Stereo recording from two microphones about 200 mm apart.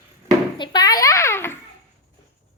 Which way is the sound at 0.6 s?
20° left (ahead or behind).